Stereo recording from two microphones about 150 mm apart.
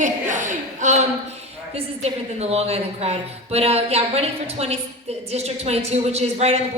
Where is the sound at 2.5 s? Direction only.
45° right (ahead or behind).